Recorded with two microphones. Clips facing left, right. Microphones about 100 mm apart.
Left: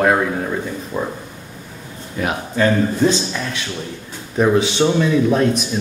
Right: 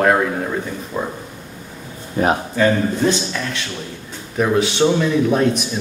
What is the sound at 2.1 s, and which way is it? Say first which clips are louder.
Speech: right 5 dB; 35° right (ahead or behind).